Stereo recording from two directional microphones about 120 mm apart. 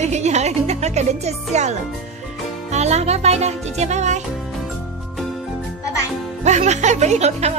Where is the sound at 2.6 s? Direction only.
70° right (ahead or behind).